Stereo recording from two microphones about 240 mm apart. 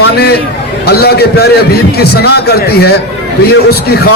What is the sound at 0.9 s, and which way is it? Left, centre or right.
A man's voice, left.